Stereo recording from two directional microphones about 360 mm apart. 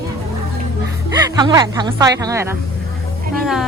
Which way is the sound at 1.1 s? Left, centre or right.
Centre.